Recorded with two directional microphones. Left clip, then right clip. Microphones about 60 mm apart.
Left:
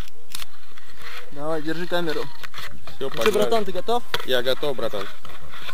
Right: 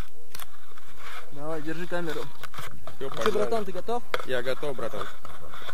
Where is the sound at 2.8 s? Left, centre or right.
Left.